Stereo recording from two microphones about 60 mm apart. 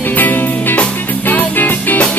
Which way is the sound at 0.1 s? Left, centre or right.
Left.